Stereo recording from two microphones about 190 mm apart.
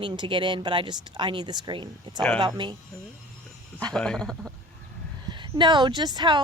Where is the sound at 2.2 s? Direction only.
5° left (ahead or behind).